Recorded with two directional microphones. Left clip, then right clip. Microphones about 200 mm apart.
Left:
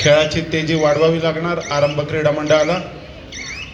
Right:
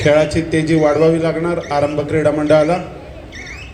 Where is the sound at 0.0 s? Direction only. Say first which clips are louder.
Even; 75° right (ahead or behind).